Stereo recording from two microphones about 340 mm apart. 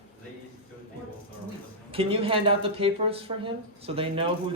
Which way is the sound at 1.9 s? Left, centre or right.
Centre.